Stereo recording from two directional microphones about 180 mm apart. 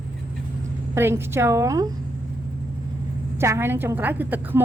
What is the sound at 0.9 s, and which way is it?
Speech, 15° right (ahead or behind).